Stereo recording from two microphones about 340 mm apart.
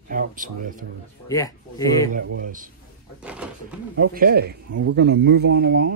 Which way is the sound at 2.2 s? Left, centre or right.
Right.